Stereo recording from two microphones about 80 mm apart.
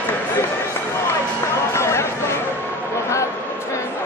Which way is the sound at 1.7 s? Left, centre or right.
Left.